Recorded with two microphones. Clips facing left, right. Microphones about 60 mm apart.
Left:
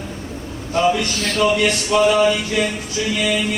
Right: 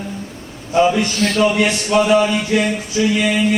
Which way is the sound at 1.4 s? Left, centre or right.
Centre.